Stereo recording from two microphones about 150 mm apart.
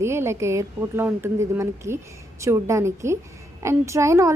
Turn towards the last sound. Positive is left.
turn(degrees=-20)  # may be behind; listen again after turning